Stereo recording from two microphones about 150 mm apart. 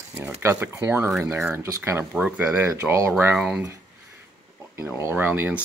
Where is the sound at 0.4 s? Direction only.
20° right (ahead or behind).